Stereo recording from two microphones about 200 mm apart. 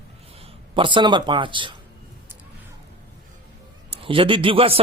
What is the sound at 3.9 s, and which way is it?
Speech, 25° right (ahead or behind).